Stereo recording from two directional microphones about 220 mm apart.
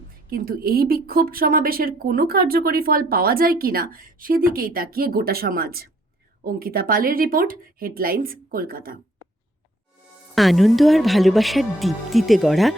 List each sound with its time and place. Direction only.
0.3 s speech: 40° right (ahead or behind)
10.3 s speech: centre (ahead or behind)